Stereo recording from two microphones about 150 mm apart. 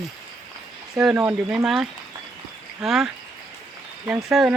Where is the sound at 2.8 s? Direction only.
5° right (ahead or behind).